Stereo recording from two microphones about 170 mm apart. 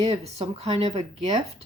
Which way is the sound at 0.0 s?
35° right (ahead or behind).